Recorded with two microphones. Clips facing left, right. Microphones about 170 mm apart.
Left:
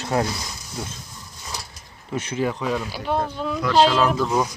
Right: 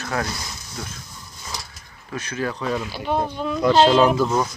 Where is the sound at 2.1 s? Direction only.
25° left (ahead or behind).